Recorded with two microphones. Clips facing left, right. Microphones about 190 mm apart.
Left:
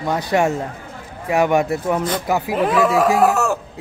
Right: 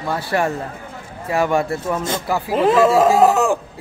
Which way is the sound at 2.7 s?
25° right (ahead or behind).